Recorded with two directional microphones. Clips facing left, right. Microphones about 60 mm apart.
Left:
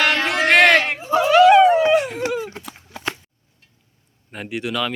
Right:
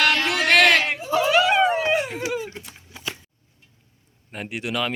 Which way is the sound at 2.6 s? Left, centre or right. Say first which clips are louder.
Left 4 dB; left.